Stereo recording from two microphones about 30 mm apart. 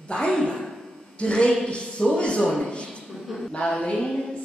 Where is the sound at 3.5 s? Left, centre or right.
Left.